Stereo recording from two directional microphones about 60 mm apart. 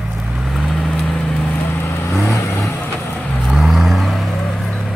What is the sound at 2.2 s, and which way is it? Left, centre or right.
Vehicle, left.